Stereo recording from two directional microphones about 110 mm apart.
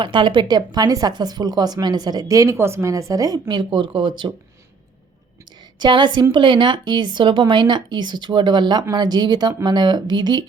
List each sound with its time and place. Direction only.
0.0 s speech: 50° right (ahead or behind)
3.5 s speech: 45° right (ahead or behind)
5.8 s speech: 45° right (ahead or behind)